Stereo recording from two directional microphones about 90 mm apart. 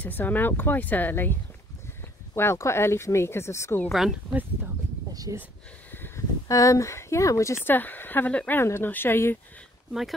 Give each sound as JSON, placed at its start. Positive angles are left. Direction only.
{"t": 0.0, "sound": "speech", "side_deg": 20}
{"t": 3.9, "sound": "speech", "side_deg": -5}
{"t": 5.1, "sound": "speech", "side_deg": -40}
{"t": 5.9, "sound": "a sound", "side_deg": 25}
{"t": 6.4, "sound": "speech", "side_deg": 35}
{"t": 7.6, "sound": "speech", "side_deg": 20}